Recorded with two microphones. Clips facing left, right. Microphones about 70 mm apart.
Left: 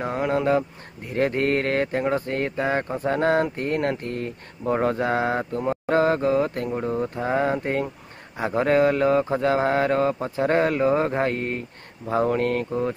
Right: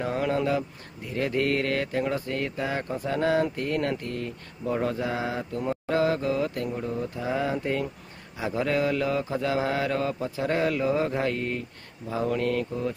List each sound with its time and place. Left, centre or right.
0.0 s speech: left
0.5 s mantra: left
4.0 s speech: left
5.5 s mantra: left
12.1 s speech: left